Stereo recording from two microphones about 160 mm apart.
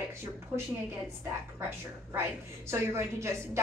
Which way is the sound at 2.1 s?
15° right (ahead or behind).